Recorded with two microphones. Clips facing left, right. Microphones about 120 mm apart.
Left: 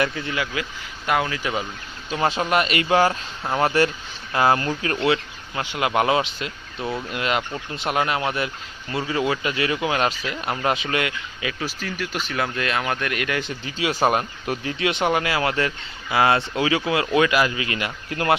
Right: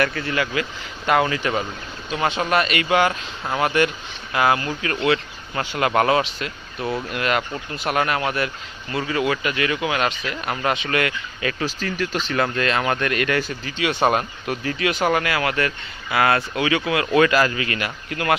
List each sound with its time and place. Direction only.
0.0 s speech: 15° left (ahead or behind)
1.0 s speech: centre (ahead or behind)
2.4 s speech: 20° left (ahead or behind)
3.1 s speech: 15° left (ahead or behind)
3.6 s speech: 30° left (ahead or behind)
5.5 s speech: 10° left (ahead or behind)
6.7 s speech: centre (ahead or behind)
7.1 s speech: 20° left (ahead or behind)
13.4 s speech: 25° left (ahead or behind)
17.2 s speech: 10° left (ahead or behind)